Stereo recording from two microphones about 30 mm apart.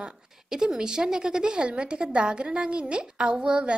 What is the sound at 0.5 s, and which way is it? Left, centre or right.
A woman's voice, centre.